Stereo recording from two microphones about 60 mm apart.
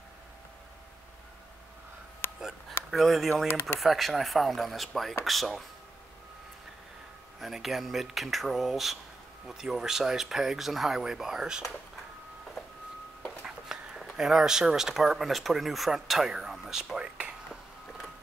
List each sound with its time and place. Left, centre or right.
2.2 s a sound: left
2.9 s speech: centre
7.3 s speech: centre
13.5 s speech: centre